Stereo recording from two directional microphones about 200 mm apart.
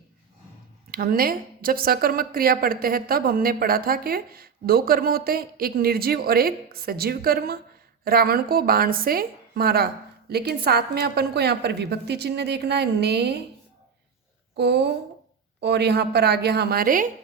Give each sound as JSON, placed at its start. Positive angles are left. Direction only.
{"t": 0.9, "sound": "speech", "side_deg": -45}
{"t": 14.5, "sound": "a woman's voice", "side_deg": -55}